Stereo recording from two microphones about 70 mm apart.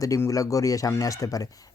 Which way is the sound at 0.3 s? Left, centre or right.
Left.